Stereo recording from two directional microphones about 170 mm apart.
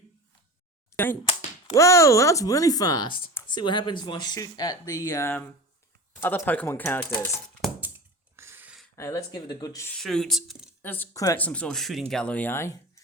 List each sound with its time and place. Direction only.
0.9 s speech: 10° left (ahead or behind)
7.8 s a sound: 15° right (ahead or behind)
9.0 s speech: 20° left (ahead or behind)
10.0 s speech: centre (ahead or behind)
10.8 s speech: 10° left (ahead or behind)
11.3 s speech: 10° left (ahead or behind)